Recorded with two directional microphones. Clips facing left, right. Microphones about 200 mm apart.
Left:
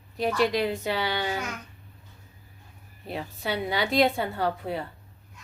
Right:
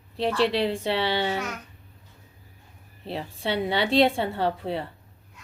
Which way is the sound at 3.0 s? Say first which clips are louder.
Right 2 dB; 30° right (ahead or behind).